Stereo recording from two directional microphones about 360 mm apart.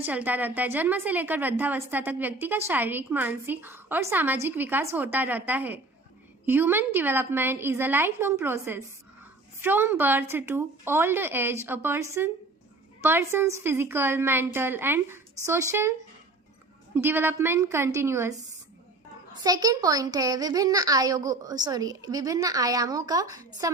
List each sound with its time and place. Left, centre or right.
0.0 s a woman's voice: centre
19.4 s a woman's voice: centre